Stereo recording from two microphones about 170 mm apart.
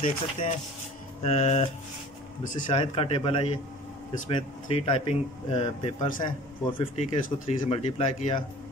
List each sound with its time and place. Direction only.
0.0 s speech: 50° left (ahead or behind)
2.7 s speech: 35° left (ahead or behind)
7.0 s speech: 45° left (ahead or behind)